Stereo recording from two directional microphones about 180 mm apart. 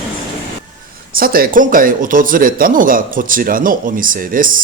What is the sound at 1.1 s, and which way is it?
Speech, 55° right (ahead or behind).